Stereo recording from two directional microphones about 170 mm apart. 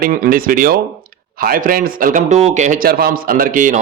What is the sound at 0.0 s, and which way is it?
Speech, 55° right (ahead or behind).